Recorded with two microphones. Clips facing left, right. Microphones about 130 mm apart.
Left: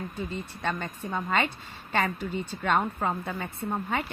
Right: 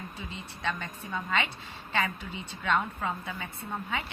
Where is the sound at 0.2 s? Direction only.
50° left (ahead or behind).